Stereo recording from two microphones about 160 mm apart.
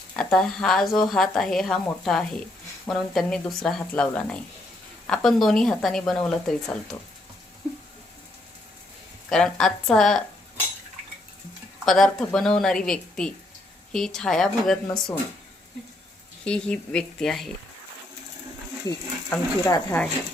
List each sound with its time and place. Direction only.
0.2 s speech: 5° left (ahead or behind)
9.3 s speech: 5° left (ahead or behind)
11.9 s speech: 5° left (ahead or behind)
16.4 s speech: 5° left (ahead or behind)
18.9 s speech: 25° left (ahead or behind)